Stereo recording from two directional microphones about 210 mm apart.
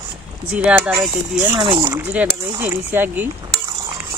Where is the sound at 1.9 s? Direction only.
10° right (ahead or behind).